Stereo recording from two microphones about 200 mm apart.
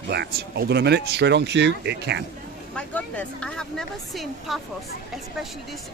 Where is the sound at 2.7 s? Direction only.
5° left (ahead or behind).